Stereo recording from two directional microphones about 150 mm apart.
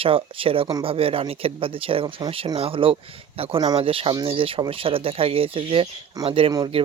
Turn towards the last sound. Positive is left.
turn(degrees=-40)  # may be behind; listen again after turning